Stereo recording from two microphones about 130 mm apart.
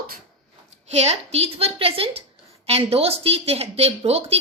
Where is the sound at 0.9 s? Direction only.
55° right (ahead or behind).